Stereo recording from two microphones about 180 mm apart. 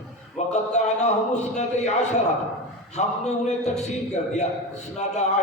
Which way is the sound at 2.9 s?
40° left (ahead or behind).